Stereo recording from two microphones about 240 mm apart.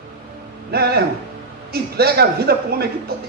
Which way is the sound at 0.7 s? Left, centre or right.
Right.